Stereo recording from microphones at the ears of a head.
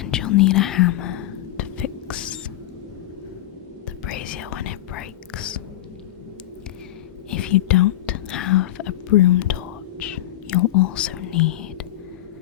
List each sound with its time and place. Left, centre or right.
0.0 s whispering: left
4.0 s whispering: left
7.3 s whispering: left